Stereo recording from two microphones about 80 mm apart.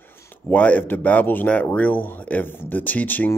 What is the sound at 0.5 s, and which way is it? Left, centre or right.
Speech, centre.